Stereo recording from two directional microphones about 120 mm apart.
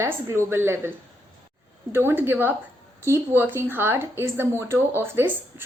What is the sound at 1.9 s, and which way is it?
Speech, 20° right (ahead or behind).